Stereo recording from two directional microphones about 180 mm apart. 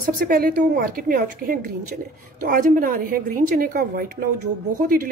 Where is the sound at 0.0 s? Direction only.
50° right (ahead or behind).